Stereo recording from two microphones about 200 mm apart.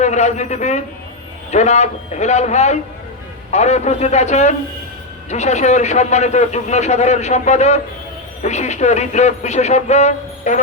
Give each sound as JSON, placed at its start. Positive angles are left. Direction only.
{"t": 0.0, "sound": "a man's voice", "side_deg": 35}